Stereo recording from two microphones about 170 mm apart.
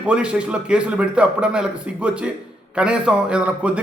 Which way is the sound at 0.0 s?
5° right (ahead or behind).